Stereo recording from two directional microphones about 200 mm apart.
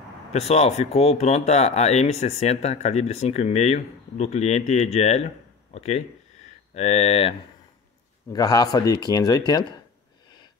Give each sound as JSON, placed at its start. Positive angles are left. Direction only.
{"t": 0.3, "sound": "speech", "side_deg": 30}
{"t": 8.3, "sound": "speech", "side_deg": 20}